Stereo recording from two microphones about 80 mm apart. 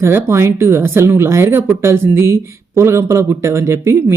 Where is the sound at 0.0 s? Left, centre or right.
Right.